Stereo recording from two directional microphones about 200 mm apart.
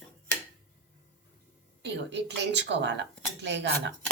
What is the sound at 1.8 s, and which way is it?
Speech, 60° right (ahead or behind).